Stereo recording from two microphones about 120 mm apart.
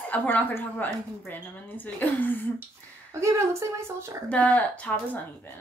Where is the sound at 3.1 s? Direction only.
25° right (ahead or behind).